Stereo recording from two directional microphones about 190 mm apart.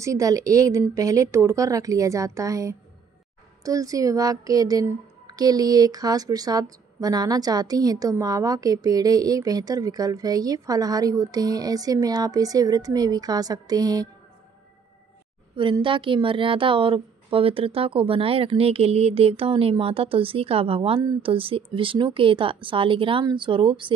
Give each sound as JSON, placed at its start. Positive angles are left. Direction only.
{"t": 0.0, "sound": "a woman's voice", "side_deg": -15}
{"t": 15.5, "sound": "speech", "side_deg": -25}